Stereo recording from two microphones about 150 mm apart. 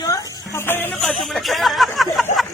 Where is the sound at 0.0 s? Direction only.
20° left (ahead or behind).